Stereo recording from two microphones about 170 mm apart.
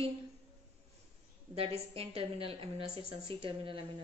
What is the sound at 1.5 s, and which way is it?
A woman's voice, 35° right (ahead or behind).